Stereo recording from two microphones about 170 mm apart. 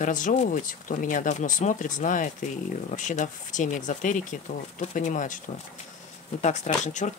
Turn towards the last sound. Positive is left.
turn(degrees=45)  # may be behind; listen again after turning